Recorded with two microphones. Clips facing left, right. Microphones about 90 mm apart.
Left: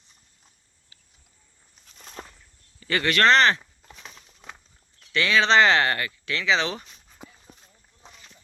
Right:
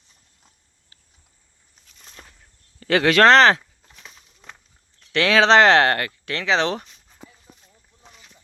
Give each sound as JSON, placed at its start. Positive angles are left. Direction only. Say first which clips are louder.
{"t": 2.4, "sound": "a sound", "louder": "right 5 dB", "side_deg": -80}
{"t": 4.4, "sound": "walk", "louder": "left 1 dB", "side_deg": 10}
{"t": 5.1, "sound": "speech", "louder": "right 5 dB", "side_deg": -85}